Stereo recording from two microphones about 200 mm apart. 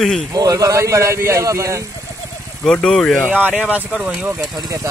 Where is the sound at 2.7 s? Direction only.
5° left (ahead or behind).